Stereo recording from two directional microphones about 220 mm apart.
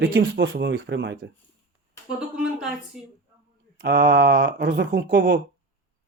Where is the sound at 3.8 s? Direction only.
50° right (ahead or behind).